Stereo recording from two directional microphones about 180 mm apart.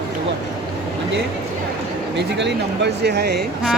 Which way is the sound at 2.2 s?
70° right (ahead or behind).